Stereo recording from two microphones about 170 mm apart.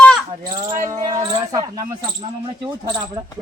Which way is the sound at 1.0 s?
25° right (ahead or behind).